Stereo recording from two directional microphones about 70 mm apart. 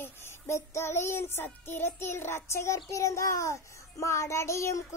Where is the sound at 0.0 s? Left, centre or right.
Left.